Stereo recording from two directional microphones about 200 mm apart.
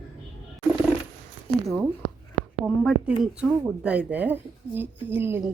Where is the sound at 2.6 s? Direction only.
Centre (ahead or behind).